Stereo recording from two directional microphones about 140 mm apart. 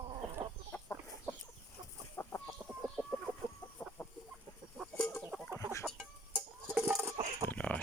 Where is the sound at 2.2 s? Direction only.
15° left (ahead or behind).